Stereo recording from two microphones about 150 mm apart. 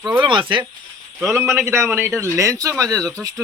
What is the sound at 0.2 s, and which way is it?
Speech, 35° right (ahead or behind).